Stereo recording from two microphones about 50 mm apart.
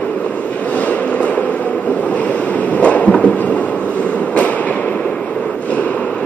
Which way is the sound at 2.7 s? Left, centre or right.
Left.